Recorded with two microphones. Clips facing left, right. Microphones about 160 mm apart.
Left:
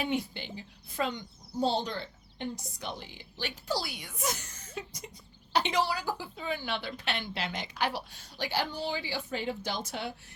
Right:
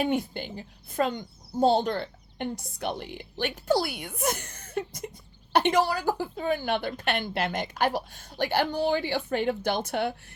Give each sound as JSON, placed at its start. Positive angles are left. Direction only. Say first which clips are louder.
{"t": 0.0, "sound": "a woman's voice", "louder": "right 5 dB", "side_deg": -50}